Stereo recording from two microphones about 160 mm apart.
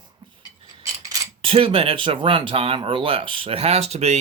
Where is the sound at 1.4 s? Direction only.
35° right (ahead or behind).